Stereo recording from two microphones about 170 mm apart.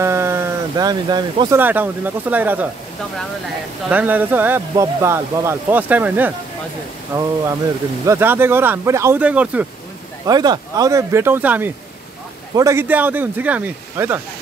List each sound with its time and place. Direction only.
0.0 s a sound: 15° right (ahead or behind)
1.6 s speech: 10° right (ahead or behind)
3.9 s speech: 10° right (ahead or behind)
10.2 s speech: 25° right (ahead or behind)